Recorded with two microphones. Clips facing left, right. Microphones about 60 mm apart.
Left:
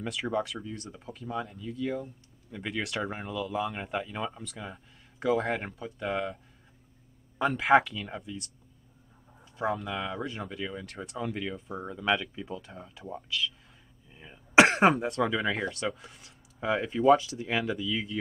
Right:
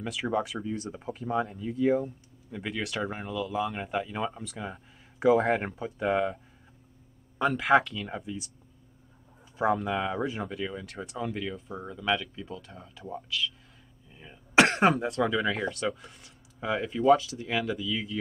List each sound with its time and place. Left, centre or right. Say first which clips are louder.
0.0 s speech: right 1 dB; centre
7.3 s speech: even; centre
9.6 s speech: right 4 dB; centre